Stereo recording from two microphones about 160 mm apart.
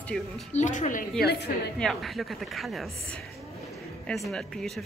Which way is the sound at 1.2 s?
90° left.